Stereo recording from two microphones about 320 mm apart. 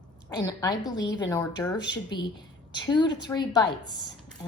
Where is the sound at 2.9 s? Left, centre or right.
Centre.